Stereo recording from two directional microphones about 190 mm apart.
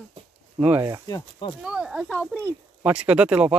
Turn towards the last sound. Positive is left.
turn(degrees=-5)  # may be behind; listen again after turning